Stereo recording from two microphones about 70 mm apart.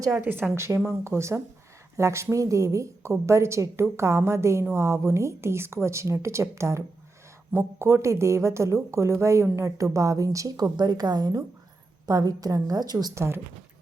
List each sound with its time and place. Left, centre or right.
0.2 s speech: right
0.5 s speech: right
10.8 s a woman's voice: right
13.1 s speech: right